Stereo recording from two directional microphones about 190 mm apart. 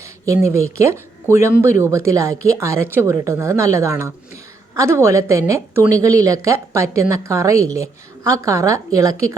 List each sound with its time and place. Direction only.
0.0 s a woman's voice: 15° right (ahead or behind)